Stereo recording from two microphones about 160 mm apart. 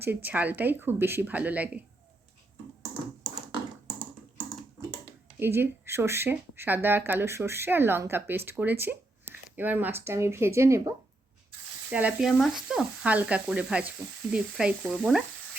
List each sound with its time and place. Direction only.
0.0 s speech: 10° right (ahead or behind)
5.4 s speech: 15° right (ahead or behind)
11.9 s speech: 10° right (ahead or behind)
14.3 s sizzle: 5° right (ahead or behind)